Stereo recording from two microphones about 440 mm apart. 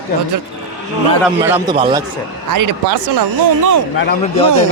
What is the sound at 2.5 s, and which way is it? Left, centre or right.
Speech, right.